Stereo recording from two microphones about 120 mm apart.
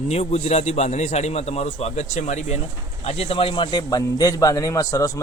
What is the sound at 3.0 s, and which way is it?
A man's voice, 60° left (ahead or behind).